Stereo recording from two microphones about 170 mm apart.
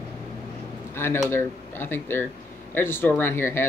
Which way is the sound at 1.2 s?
15° left (ahead or behind).